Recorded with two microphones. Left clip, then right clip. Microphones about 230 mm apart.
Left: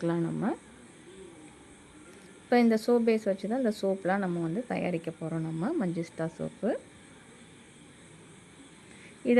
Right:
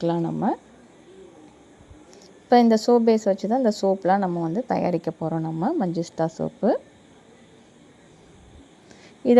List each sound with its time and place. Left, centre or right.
0.0 s a woman's voice: centre
2.5 s a woman's voice: centre
5.4 s a woman's voice: centre
9.2 s a woman's voice: centre